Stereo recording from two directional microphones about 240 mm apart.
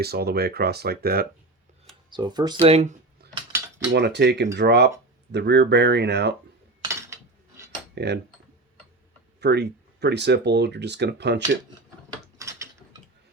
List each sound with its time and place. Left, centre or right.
0.0 s speech: right
2.0 s speech: centre
3.9 s speech: right
6.8 s cutlery: centre
7.9 s speech: right
9.4 s speech: right
12.4 s mechanisms: centre